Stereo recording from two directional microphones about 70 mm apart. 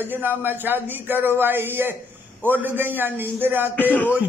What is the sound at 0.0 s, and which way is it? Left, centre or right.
A man's voice, right.